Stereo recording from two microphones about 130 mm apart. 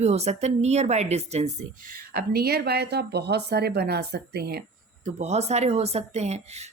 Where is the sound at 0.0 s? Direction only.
55° right (ahead or behind).